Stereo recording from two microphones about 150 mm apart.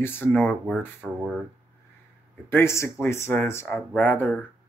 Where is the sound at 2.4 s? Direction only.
15° left (ahead or behind).